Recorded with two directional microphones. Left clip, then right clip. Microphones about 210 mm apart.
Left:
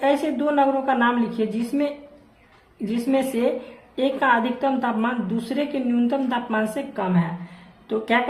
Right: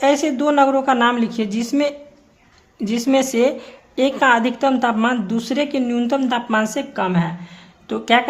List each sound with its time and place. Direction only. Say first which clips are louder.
0.0 s a woman's voice: right 4 dB; 40° right (ahead or behind)